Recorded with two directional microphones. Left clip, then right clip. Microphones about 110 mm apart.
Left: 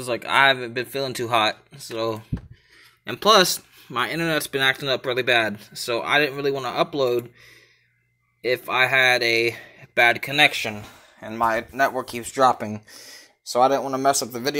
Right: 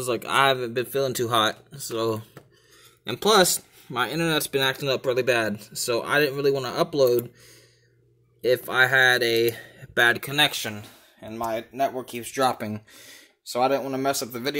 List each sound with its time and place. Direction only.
0.0 s speech: 25° right (ahead or behind)
3.1 s speech: 20° right (ahead or behind); by 7.2 s 40° right (ahead or behind)
8.5 s speech: 30° right (ahead or behind)
11.2 s speech: centre (ahead or behind)